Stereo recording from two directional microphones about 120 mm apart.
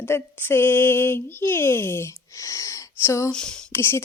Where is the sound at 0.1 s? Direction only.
15° left (ahead or behind).